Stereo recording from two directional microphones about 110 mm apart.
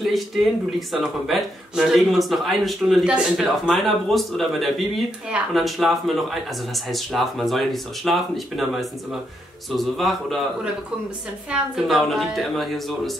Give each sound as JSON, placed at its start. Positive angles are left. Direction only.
{"t": 0.0, "sound": "speech", "side_deg": 0}